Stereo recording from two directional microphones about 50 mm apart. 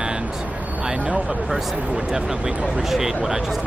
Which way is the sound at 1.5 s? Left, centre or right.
Centre.